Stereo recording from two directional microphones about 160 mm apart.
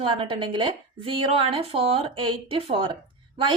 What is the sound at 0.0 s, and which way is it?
A woman's voice, 35° right (ahead or behind).